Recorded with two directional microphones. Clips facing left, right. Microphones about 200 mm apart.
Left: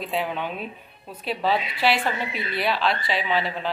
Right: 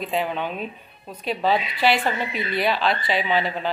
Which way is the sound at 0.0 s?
Centre (ahead or behind).